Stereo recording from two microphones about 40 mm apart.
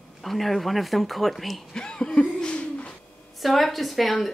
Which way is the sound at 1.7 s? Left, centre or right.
Centre.